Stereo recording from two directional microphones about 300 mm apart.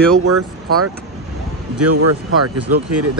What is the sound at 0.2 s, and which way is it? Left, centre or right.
Speech, right.